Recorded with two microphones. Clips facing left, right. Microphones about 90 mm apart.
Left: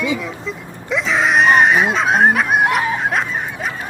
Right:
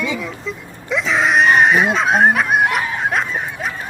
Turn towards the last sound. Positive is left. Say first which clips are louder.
# even
turn(degrees=0)  # may be behind; listen again after turning